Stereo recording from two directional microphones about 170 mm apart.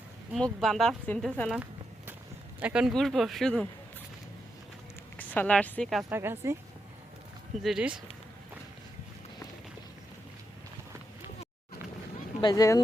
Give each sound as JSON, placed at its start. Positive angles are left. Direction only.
{"t": 0.3, "sound": "speech", "side_deg": 0}
{"t": 5.1, "sound": "speech", "side_deg": 10}
{"t": 6.1, "sound": "speech", "side_deg": -15}
{"t": 7.6, "sound": "speech", "side_deg": -5}
{"t": 12.4, "sound": "speech", "side_deg": 20}